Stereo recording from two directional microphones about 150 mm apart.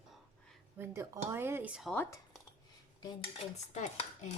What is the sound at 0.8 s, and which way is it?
Speech, 15° right (ahead or behind).